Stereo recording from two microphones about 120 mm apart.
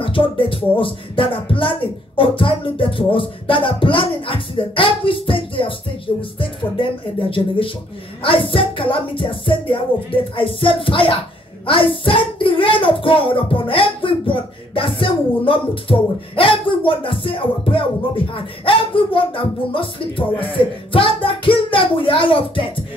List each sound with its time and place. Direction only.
0.0 s a child's voice: 45° left (ahead or behind)